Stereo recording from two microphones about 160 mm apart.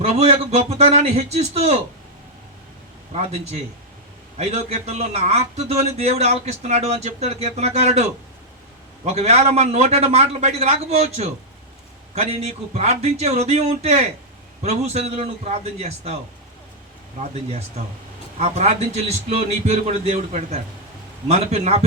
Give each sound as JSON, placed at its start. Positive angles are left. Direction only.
{"t": 0.0, "sound": "a man's voice", "side_deg": -40}
{"t": 3.1, "sound": "a man's voice", "side_deg": -40}
{"t": 9.1, "sound": "a man's voice", "side_deg": -40}
{"t": 17.2, "sound": "a man's voice", "side_deg": -40}